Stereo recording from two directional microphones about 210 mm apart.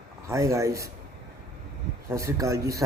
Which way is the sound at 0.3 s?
15° right (ahead or behind).